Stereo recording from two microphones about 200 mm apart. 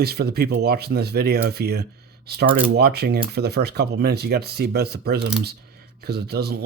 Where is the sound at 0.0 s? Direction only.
50° right (ahead or behind).